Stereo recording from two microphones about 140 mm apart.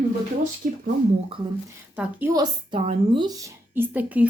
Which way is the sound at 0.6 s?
70° right (ahead or behind).